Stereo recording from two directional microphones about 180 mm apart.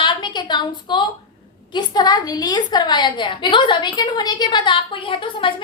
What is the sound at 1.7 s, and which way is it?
A woman's voice, 25° left (ahead or behind).